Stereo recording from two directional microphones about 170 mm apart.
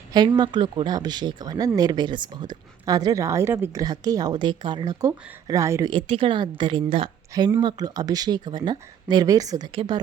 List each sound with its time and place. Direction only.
0.1 s speech: 25° right (ahead or behind)